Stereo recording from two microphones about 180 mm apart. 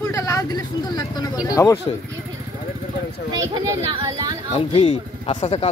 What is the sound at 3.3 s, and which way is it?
Speech, 20° right (ahead or behind).